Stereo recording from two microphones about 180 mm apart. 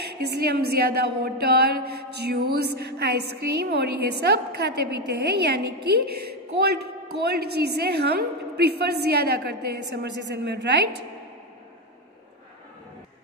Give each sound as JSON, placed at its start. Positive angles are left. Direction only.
{"t": 0.0, "sound": "a woman's voice", "side_deg": -65}